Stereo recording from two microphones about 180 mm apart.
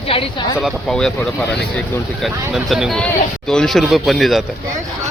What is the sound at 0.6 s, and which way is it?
Speech, centre (ahead or behind).